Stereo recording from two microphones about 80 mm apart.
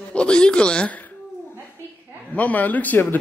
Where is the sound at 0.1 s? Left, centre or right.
Centre.